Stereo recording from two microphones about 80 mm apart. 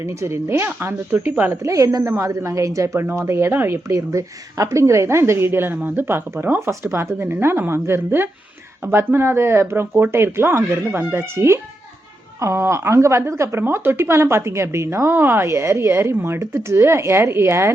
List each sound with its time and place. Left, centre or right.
0.0 s a woman's voice: right
1.1 s speech: right
1.6 s a woman's voice: right
3.8 s a woman's voice: right